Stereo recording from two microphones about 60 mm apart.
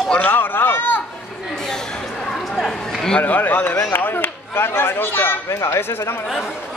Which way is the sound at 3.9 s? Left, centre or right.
Left.